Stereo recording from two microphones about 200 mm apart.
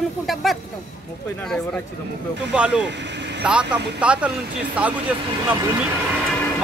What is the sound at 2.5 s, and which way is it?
Speech, 5° right (ahead or behind).